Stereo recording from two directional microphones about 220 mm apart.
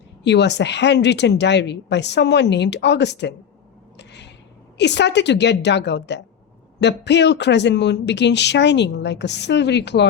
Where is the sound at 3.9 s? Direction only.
50° left (ahead or behind).